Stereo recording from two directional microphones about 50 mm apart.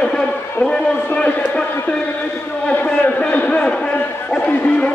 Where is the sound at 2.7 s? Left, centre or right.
Left.